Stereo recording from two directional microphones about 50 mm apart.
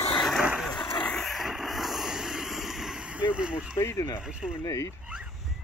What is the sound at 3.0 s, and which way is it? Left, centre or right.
Speech, right.